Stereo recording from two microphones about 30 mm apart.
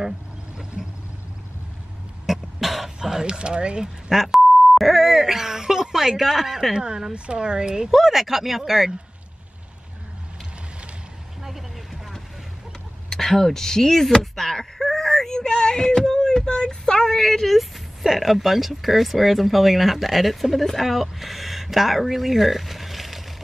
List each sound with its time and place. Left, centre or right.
0.8 s vehicle: right
2.2 s cough: centre
3.0 s speech: right
4.1 s speech: centre
6.7 s speech: right
7.9 s speech: centre
11.4 s vehicle: centre
13.1 s speech: centre
14.3 s whimper: centre
15.2 s speech: left
16.2 s a sound: centre
18.0 s speech: centre